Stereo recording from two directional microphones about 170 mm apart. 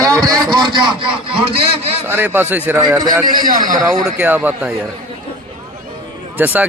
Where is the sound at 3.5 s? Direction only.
50° right (ahead or behind).